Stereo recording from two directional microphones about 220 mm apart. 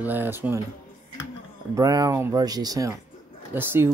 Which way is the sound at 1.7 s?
15° right (ahead or behind).